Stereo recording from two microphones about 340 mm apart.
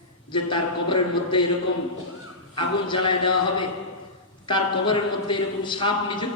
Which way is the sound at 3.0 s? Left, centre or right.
Left.